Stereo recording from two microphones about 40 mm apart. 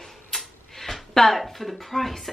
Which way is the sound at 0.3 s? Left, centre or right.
Centre.